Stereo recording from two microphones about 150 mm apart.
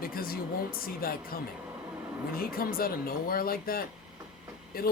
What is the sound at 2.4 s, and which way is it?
Speech, 75° left (ahead or behind).